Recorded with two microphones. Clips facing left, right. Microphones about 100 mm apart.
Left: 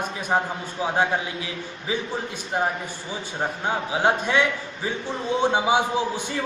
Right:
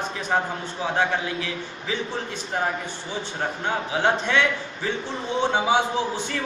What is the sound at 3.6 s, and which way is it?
Speech, 15° left (ahead or behind).